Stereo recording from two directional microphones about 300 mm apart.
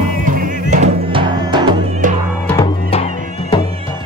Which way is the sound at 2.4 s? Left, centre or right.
Centre.